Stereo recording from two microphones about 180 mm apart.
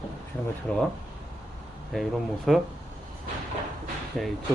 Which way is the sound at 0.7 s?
5° left (ahead or behind).